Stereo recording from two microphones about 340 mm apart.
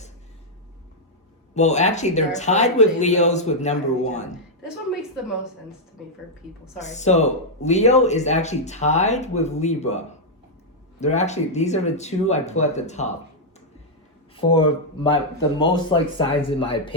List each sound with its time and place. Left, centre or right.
1.5 s speech: centre
6.7 s speech: centre
11.0 s speech: centre
14.3 s speech: centre